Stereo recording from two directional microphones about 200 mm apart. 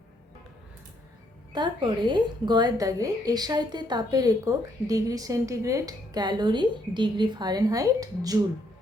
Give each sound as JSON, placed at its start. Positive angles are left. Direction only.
{"t": 1.5, "sound": "a woman's voice", "side_deg": -20}